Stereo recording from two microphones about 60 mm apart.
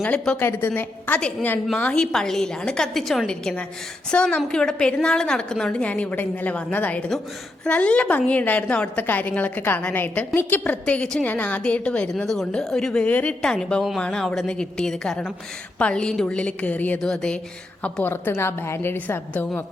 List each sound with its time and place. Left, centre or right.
0.0 s a woman's voice: left
0.3 s a woman's voice: left
1.9 s a woman's voice: centre
3.2 s a woman's voice: centre
5.8 s a woman's voice: left
10.6 s a woman's voice: left
12.1 s a woman's voice: centre
13.1 s a woman's voice: left
13.4 s a woman's voice: centre; by 17.0 s left
17.0 s a woman's voice: centre
18.0 s a woman's voice: left
18.9 s a woman's voice: left